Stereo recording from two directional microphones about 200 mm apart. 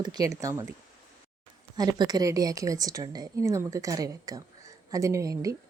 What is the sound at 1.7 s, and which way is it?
A woman's voice, 20° right (ahead or behind).